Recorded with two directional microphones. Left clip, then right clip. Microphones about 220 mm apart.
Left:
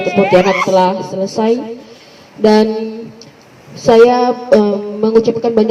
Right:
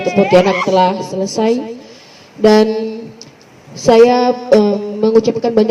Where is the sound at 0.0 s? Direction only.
50° right (ahead or behind).